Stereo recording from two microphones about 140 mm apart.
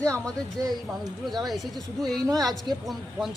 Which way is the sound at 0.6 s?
25° right (ahead or behind).